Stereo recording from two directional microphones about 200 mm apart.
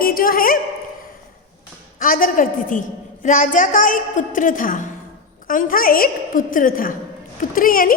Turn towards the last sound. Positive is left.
turn(degrees=45)  # may be behind; listen again after turning